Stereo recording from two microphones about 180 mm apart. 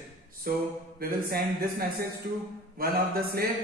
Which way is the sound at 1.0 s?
55° right (ahead or behind).